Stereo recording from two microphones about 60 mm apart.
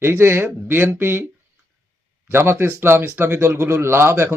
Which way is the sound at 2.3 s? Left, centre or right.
Right.